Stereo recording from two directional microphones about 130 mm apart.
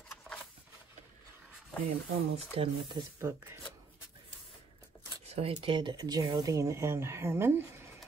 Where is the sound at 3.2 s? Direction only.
20° right (ahead or behind).